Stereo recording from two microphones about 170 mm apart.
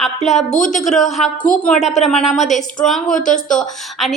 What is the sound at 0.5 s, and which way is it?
Speech, 45° left (ahead or behind).